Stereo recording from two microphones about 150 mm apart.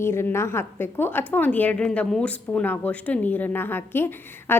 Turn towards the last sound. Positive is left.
turn(degrees=15)  # may be behind; listen again after turning